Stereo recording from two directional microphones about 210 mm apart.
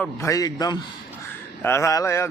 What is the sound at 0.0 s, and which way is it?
Speech, 15° left (ahead or behind).